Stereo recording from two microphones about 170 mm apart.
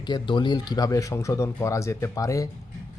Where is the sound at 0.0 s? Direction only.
25° left (ahead or behind).